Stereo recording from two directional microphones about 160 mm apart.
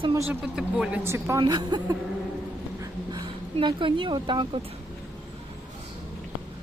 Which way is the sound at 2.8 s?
30° right (ahead or behind).